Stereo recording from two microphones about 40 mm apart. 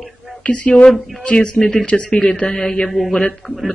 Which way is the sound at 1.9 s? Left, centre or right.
Left.